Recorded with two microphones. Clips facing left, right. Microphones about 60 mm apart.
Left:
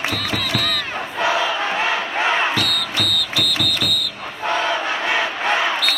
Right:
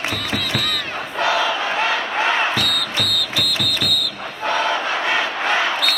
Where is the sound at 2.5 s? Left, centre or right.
Centre.